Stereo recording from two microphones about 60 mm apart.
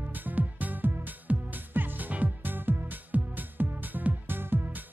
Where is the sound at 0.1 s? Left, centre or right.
Right.